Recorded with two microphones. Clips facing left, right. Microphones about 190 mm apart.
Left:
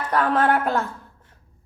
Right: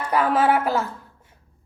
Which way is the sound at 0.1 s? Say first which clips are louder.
Right 1 dB; 5° right (ahead or behind).